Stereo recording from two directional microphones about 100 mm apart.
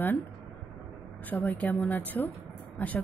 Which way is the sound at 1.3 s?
15° left (ahead or behind).